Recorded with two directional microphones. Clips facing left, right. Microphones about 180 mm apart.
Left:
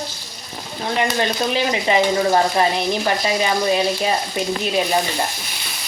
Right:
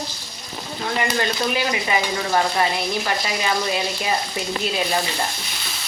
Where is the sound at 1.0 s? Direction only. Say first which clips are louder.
Left 1 dB; 20° left (ahead or behind).